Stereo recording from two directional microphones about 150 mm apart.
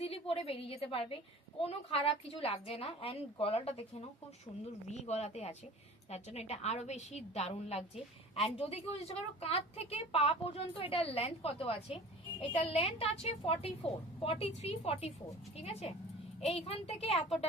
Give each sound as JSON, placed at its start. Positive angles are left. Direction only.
{"t": 0.0, "sound": "a woman's voice", "side_deg": 40}
{"t": 4.9, "sound": "a woman's voice", "side_deg": 50}